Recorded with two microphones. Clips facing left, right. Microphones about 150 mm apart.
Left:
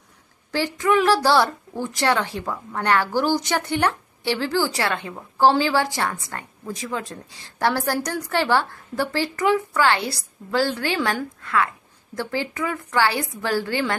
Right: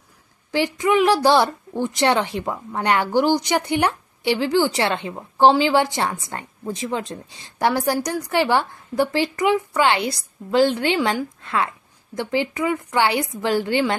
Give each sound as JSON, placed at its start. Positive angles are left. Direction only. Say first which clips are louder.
{"t": 0.5, "sound": "a woman's voice", "louder": "right 2 dB", "side_deg": -15}